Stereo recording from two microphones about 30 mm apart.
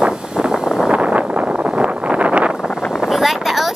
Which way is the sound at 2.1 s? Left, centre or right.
Right.